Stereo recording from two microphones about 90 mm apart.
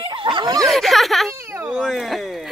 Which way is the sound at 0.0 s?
70° right (ahead or behind).